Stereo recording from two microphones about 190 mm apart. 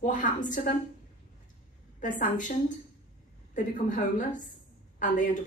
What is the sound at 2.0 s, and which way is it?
Speech, 40° left (ahead or behind).